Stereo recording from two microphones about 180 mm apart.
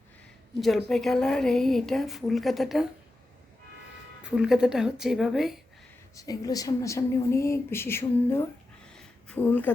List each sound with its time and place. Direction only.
0.9 s speech: centre (ahead or behind)
4.2 s speech: 5° right (ahead or behind)
6.1 s speech: 20° left (ahead or behind)
8.9 s a sound: 5° left (ahead or behind)